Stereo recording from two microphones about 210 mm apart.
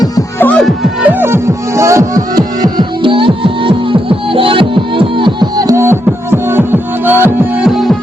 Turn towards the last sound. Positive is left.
turn(degrees=0)  # may be behind; listen again after turning